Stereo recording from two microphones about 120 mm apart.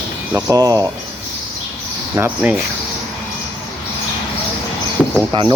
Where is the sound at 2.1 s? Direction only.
15° right (ahead or behind).